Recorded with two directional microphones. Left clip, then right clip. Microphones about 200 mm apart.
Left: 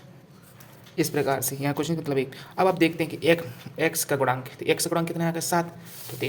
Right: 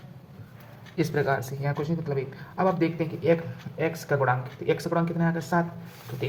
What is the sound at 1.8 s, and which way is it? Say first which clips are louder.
Speech: left 4 dB; 40° left (ahead or behind).